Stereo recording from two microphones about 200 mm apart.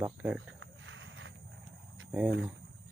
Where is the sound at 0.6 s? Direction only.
70° right (ahead or behind).